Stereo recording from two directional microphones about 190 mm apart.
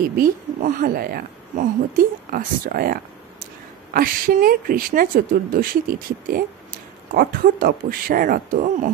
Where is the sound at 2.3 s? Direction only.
50° right (ahead or behind).